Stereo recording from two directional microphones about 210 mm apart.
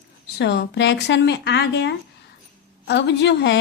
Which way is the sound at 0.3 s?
55° left (ahead or behind).